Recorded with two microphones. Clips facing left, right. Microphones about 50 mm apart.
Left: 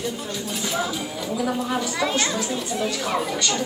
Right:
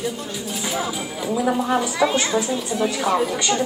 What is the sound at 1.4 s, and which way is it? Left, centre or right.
Speech, centre.